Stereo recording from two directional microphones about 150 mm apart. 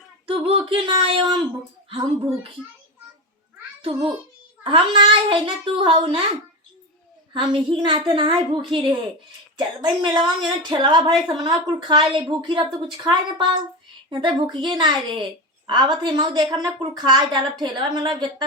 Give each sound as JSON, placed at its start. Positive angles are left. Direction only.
{"t": 0.3, "sound": "a woman's voice", "side_deg": -40}
{"t": 3.8, "sound": "a child's voice", "side_deg": -35}
{"t": 7.3, "sound": "a woman's voice", "side_deg": -35}